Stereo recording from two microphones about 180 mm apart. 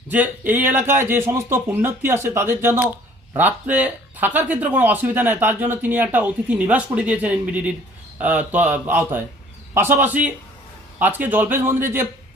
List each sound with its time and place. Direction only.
0.1 s speech: 10° right (ahead or behind)